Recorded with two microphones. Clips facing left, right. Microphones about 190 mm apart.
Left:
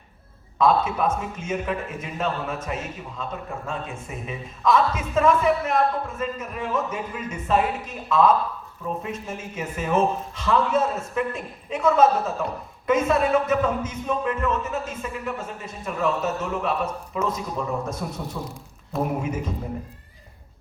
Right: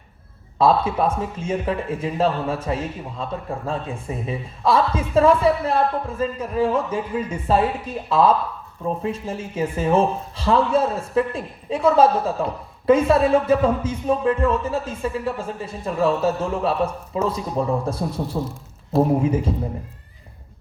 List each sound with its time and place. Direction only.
0.6 s a woman's voice: 30° right (ahead or behind)